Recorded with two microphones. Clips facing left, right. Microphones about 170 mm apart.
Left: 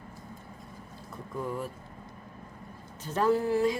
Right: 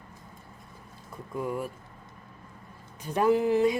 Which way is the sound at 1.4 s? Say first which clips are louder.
Right 2 dB; 10° right (ahead or behind).